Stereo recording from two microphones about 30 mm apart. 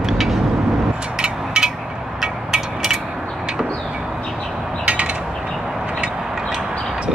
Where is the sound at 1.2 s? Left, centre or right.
Right.